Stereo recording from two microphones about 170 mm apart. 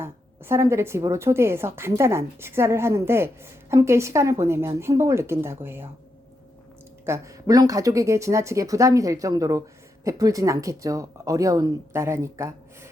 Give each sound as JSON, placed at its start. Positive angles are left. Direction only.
{"t": 0.0, "sound": "a woman's voice", "side_deg": -15}
{"t": 7.0, "sound": "speech", "side_deg": -20}